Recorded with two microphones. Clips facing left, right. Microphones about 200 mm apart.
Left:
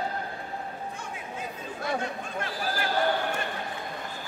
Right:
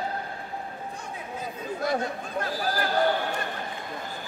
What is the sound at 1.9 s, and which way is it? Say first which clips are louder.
Speech: right 1 dB; 40° right (ahead or behind).